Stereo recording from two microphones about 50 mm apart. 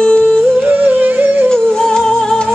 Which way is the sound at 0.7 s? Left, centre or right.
Right.